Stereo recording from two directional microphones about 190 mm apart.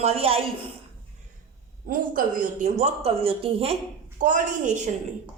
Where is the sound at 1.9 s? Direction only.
45° right (ahead or behind).